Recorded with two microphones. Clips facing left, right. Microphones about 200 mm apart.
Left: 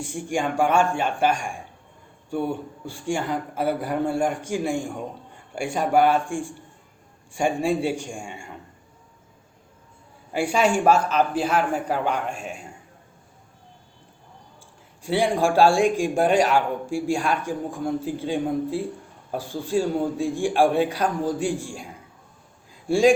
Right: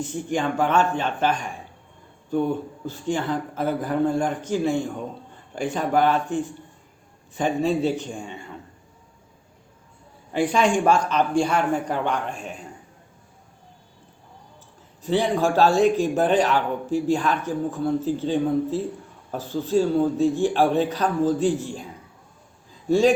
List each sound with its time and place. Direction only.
0.0 s a man's voice: 10° left (ahead or behind)
10.3 s a man's voice: 10° left (ahead or behind)
15.0 s a man's voice: 10° left (ahead or behind)
22.7 s a sound: 10° left (ahead or behind)